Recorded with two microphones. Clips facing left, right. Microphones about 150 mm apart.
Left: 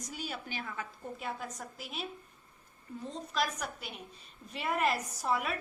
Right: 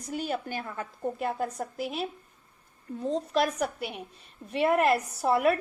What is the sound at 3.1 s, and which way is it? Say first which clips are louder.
A woman's voice: right 9 dB; 60° right (ahead or behind).